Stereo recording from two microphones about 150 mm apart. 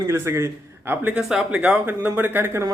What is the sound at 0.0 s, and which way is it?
A man's voice, 15° right (ahead or behind).